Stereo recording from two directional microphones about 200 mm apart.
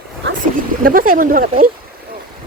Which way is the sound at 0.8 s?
45° right (ahead or behind).